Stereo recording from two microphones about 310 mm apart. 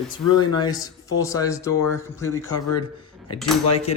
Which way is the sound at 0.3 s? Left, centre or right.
Centre.